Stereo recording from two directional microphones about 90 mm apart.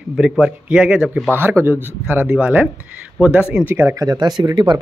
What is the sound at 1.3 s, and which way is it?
Speech, 25° right (ahead or behind).